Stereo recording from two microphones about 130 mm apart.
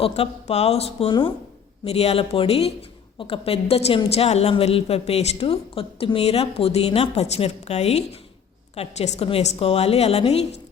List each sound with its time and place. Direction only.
0.0 s a woman's voice: 50° left (ahead or behind)